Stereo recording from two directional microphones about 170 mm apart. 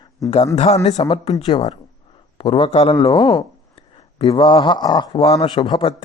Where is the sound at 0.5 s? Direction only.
40° left (ahead or behind).